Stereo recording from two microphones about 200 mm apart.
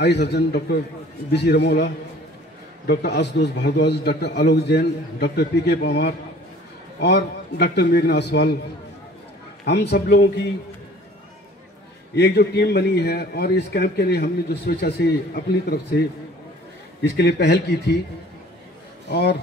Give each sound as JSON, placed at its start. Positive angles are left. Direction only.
{"t": 0.0, "sound": "a man's voice", "side_deg": 55}
{"t": 2.9, "sound": "a man's voice", "side_deg": 55}
{"t": 9.7, "sound": "a man's voice", "side_deg": 55}
{"t": 12.2, "sound": "a man's voice", "side_deg": 55}
{"t": 17.2, "sound": "a man's voice", "side_deg": 55}
{"t": 19.0, "sound": "a man's voice", "side_deg": 55}